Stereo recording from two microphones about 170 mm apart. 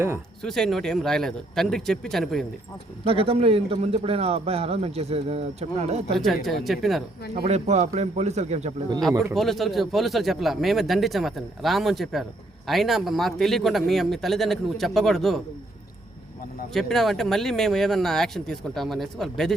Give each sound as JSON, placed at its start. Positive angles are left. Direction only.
{"t": 0.4, "sound": "speech", "side_deg": 0}
{"t": 3.0, "sound": "a man's voice", "side_deg": -35}
{"t": 6.1, "sound": "speech", "side_deg": 0}
{"t": 7.3, "sound": "a man's voice", "side_deg": -40}
{"t": 9.3, "sound": "speech", "side_deg": 0}
{"t": 16.7, "sound": "speech", "side_deg": 0}